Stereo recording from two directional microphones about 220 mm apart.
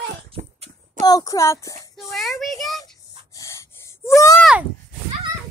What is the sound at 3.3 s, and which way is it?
Gasp, 10° left (ahead or behind).